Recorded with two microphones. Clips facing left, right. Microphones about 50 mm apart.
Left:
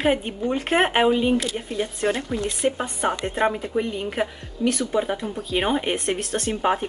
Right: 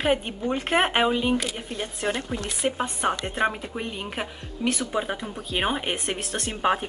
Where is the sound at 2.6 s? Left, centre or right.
Centre.